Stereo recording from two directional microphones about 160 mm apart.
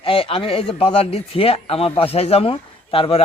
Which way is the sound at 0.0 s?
35° left (ahead or behind).